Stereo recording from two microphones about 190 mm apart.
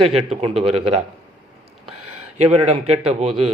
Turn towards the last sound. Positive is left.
turn(degrees=-30)  # may be behind; listen again after turning